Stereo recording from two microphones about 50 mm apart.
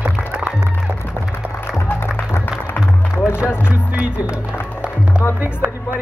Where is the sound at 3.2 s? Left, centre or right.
Centre.